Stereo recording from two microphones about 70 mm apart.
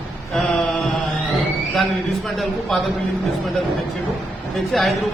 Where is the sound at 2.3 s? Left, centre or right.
Centre.